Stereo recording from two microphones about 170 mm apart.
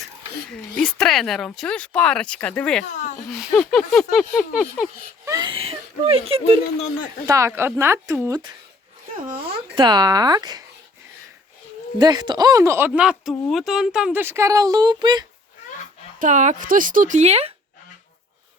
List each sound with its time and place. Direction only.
0.8 s speech: centre (ahead or behind)
2.9 s a sound: 45° left (ahead or behind)
3.2 s speech: centre (ahead or behind)
5.2 s whimper: 20° right (ahead or behind)
5.5 s speech: 35° right (ahead or behind)
7.3 s speech: 15° right (ahead or behind)
9.7 s speech: 25° right (ahead or behind)
11.9 s speech: 25° right (ahead or behind)
12.9 s speech: 5° right (ahead or behind); by 15.3 s 25° right (ahead or behind)
16.1 s a woman's voice: 50° right (ahead or behind)